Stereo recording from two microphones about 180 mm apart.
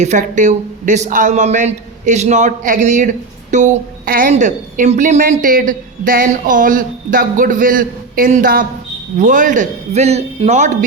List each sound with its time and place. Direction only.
0.0 s a woman's voice: 45° right (ahead or behind)